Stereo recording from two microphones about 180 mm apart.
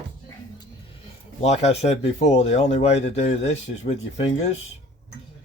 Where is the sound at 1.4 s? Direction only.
35° left (ahead or behind).